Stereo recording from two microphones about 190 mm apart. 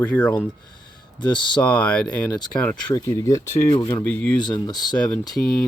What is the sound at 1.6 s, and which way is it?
Speech, 10° left (ahead or behind).